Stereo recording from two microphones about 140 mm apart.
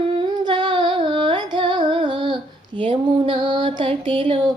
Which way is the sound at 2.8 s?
40° right (ahead or behind).